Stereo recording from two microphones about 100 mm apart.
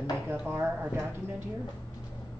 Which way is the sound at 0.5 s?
20° right (ahead or behind).